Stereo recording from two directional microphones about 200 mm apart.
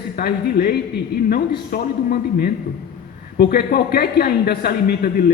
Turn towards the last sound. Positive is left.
turn(degrees=50)  # may be behind; listen again after turning